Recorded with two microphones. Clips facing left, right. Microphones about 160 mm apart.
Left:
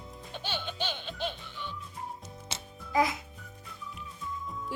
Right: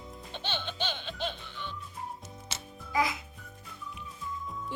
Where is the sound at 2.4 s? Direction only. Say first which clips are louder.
Left 1 dB; 30° left (ahead or behind).